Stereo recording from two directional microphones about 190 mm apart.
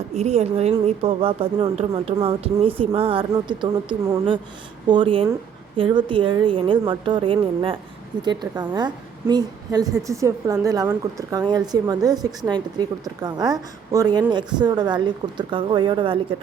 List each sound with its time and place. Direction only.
0.1 s a woman's voice: 35° right (ahead or behind)